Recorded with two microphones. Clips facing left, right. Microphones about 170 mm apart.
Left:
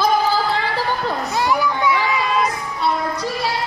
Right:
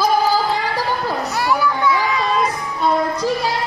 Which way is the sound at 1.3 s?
15° left (ahead or behind).